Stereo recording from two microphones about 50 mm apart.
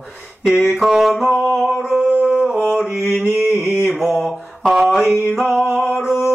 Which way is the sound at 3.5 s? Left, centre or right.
Left.